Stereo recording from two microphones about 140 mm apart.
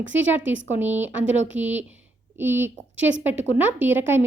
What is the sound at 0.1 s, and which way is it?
A woman's voice, 15° right (ahead or behind).